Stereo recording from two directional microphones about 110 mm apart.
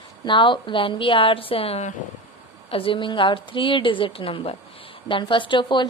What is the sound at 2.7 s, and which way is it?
Speech, 50° left (ahead or behind).